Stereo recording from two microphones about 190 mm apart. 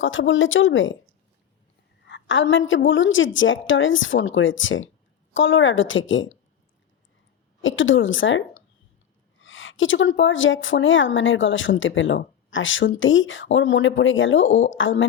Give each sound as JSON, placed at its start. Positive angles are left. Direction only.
{"t": 0.0, "sound": "a woman's voice", "side_deg": 90}
{"t": 2.0, "sound": "a woman's voice", "side_deg": 80}
{"t": 7.6, "sound": "a woman's voice", "side_deg": 90}